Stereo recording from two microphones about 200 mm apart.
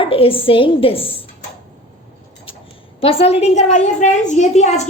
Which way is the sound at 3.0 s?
30° left (ahead or behind).